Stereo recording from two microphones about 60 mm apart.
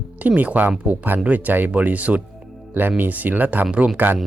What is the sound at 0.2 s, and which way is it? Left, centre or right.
Speech, right.